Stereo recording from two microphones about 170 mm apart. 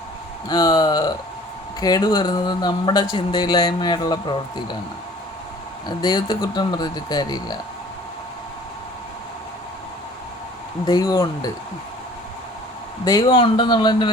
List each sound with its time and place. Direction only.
0.4 s speech: 25° left (ahead or behind)
6.0 s speech: 25° left (ahead or behind)
10.8 s speech: 25° left (ahead or behind)
13.1 s speech: 25° left (ahead or behind)